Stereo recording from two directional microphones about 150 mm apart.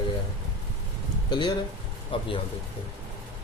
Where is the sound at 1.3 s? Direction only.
30° left (ahead or behind).